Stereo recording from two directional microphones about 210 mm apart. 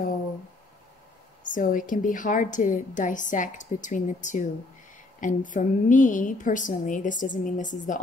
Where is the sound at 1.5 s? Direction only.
40° left (ahead or behind).